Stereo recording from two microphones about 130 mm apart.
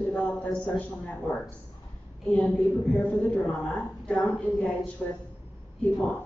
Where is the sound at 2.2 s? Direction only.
10° left (ahead or behind).